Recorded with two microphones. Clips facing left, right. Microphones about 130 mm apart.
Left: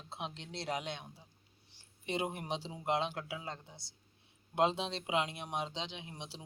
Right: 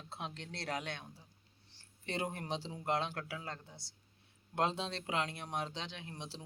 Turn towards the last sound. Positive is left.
turn(degrees=15)  # may be behind; listen again after turning